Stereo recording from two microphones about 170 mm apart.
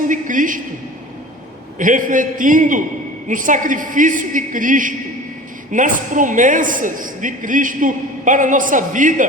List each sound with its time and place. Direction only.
0.1 s a woman's voice: 50° right (ahead or behind)
1.8 s a man's voice: 50° right (ahead or behind)